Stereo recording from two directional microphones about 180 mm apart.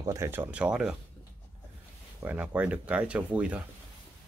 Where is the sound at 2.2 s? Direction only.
10° right (ahead or behind).